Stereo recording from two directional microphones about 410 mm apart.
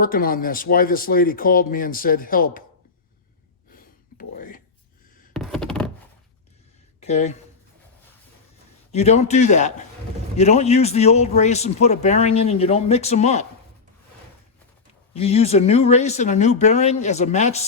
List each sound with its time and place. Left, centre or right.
0.0 s speech: left
3.8 s a sound: left
5.3 s a sound: centre
7.0 s speech: centre
8.9 s a man's voice: centre
15.1 s a man's voice: centre